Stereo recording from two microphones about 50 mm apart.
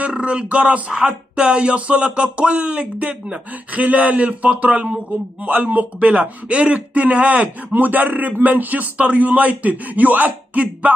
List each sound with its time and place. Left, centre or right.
0.0 s a man's voice: right